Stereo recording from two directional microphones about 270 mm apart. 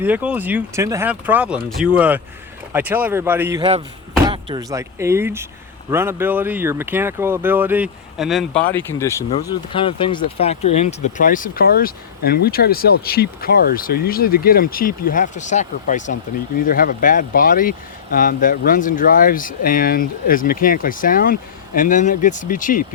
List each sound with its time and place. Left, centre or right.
0.0 s speech: centre; by 22.9 s left